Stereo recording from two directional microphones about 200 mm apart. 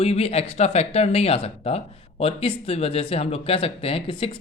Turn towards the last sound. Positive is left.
turn(degrees=25)  # may be behind; listen again after turning